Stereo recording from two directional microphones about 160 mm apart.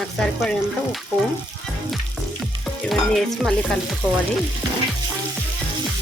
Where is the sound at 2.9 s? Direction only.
Centre (ahead or behind).